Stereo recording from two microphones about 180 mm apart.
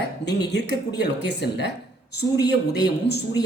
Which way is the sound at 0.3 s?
70° left (ahead or behind).